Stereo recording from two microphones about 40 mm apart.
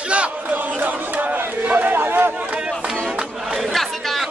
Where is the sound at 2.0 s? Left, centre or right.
Right.